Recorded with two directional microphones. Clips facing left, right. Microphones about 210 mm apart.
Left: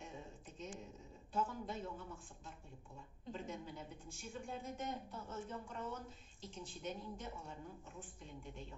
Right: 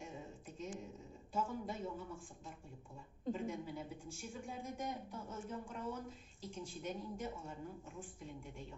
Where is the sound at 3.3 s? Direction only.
10° right (ahead or behind).